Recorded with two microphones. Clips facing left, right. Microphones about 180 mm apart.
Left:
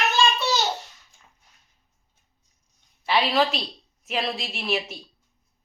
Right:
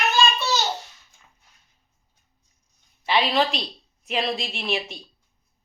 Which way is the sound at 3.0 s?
Centre (ahead or behind).